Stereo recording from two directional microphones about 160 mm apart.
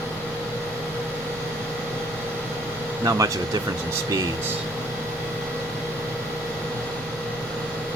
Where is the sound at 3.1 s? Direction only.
20° right (ahead or behind).